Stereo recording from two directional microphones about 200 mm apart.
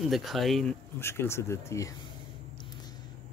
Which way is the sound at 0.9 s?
10° left (ahead or behind).